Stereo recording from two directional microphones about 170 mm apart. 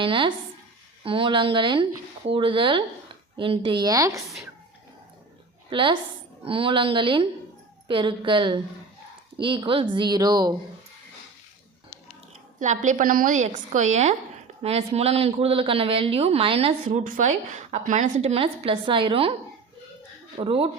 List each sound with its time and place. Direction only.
0.0 s speech: 30° right (ahead or behind)
5.7 s speech: 30° right (ahead or behind)
12.5 s a woman's voice: 45° right (ahead or behind)
17.0 s speech: 50° right (ahead or behind); by 19.3 s 30° right (ahead or behind)
20.3 s speech: 35° right (ahead or behind)